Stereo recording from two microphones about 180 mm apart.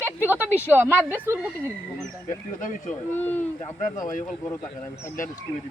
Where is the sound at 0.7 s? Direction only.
10° right (ahead or behind).